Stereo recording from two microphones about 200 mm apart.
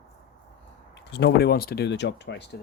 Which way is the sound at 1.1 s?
55° left (ahead or behind).